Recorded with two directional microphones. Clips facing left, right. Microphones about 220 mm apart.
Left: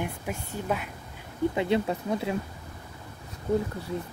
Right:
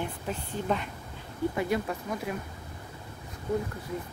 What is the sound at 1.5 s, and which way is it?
Speech, 25° left (ahead or behind).